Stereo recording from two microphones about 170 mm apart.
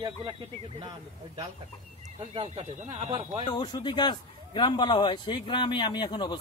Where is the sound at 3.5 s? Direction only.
25° left (ahead or behind).